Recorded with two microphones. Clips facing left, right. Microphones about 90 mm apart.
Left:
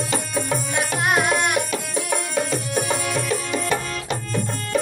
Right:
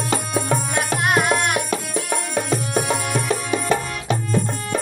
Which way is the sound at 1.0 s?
Centre (ahead or behind).